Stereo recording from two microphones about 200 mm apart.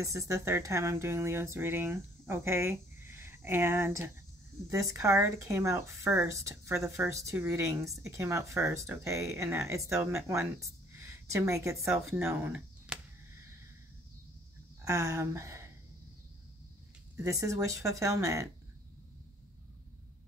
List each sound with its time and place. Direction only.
0.0 s speech: 15° right (ahead or behind)
14.9 s speech: 15° right (ahead or behind)
17.2 s speech: 15° right (ahead or behind)